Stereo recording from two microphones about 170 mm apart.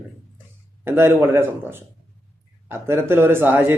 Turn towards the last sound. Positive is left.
turn(degrees=-10)  # may be behind; listen again after turning